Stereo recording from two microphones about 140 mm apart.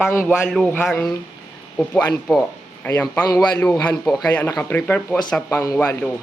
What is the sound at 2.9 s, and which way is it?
Speech, 10° left (ahead or behind).